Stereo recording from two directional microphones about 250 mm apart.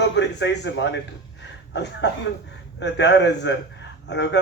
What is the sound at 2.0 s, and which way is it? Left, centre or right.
Speech, left.